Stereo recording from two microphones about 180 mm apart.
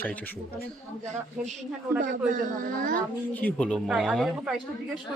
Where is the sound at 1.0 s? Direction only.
40° right (ahead or behind).